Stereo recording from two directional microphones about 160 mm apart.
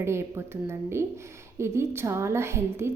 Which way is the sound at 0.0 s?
15° right (ahead or behind).